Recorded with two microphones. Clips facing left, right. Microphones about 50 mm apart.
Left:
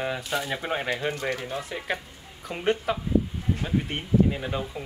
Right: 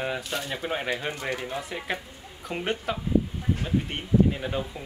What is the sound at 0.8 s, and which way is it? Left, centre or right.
Speech, centre.